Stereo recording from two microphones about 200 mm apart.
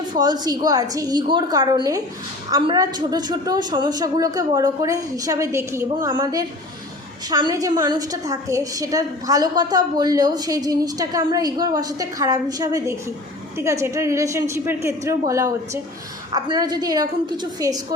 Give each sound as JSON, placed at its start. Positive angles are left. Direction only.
{"t": 0.1, "sound": "a woman's voice", "side_deg": -20}